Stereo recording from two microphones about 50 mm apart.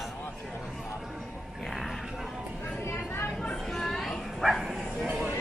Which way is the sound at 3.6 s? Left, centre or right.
Centre.